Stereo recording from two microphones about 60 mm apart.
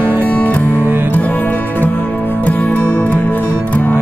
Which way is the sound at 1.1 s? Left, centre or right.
Left.